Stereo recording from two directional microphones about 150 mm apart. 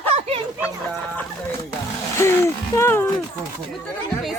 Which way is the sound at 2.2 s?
15° left (ahead or behind).